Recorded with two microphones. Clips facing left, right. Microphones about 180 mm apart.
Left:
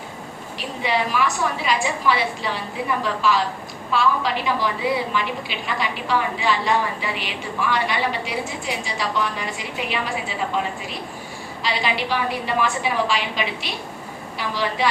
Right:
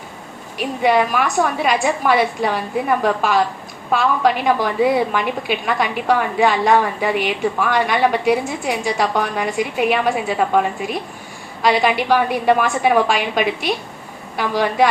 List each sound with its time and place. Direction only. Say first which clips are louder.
0.6 s a woman's voice: right 8 dB; 55° right (ahead or behind)